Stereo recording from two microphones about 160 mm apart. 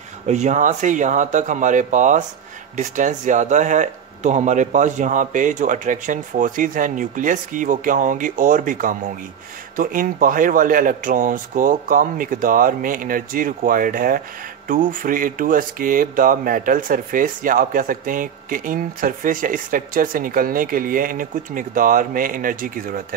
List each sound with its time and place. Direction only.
0.3 s speech: 50° right (ahead or behind)